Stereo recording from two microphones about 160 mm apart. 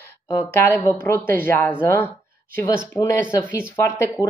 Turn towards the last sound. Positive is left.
turn(degrees=15)  # may be behind; listen again after turning